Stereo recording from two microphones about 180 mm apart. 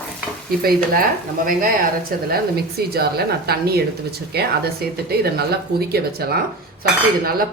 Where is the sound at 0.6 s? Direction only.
55° right (ahead or behind).